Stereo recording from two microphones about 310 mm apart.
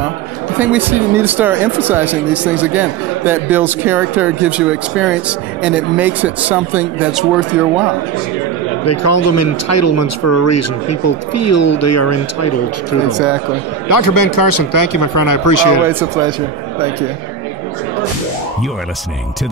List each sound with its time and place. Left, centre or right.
0.6 s speech: centre
8.8 s speech: left
13.8 s speech: left
15.9 s speech: centre